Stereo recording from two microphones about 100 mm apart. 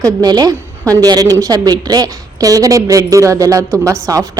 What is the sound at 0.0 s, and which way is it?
A woman's voice, 40° right (ahead or behind).